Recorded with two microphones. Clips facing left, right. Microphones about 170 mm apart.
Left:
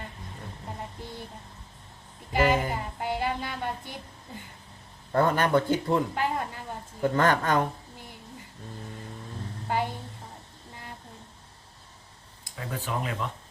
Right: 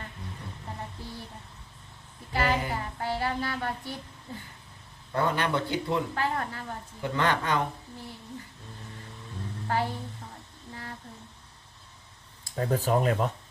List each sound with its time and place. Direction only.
2.3 s a woman's voice: 15° left (ahead or behind)
5.1 s speech: 45° left (ahead or behind)
6.1 s a woman's voice: 15° left (ahead or behind)
7.0 s speech: 45° left (ahead or behind)
9.6 s speech: 15° left (ahead or behind)
12.5 s speech: 40° right (ahead or behind)